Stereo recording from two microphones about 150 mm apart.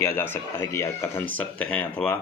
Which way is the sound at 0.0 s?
15° left (ahead or behind).